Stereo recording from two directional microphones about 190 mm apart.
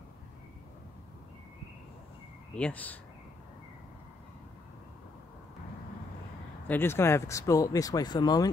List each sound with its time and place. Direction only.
2.5 s speech: 5° left (ahead or behind)
6.7 s speech: 10° left (ahead or behind)